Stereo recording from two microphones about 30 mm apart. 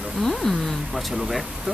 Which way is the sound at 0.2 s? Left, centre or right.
Centre.